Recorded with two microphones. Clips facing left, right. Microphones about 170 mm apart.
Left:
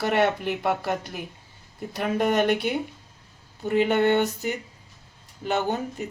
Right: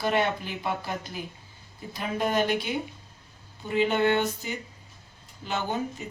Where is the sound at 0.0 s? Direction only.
65° left (ahead or behind).